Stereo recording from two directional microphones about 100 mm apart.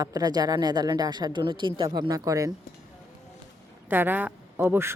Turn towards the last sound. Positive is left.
turn(degrees=-20)  # may be behind; listen again after turning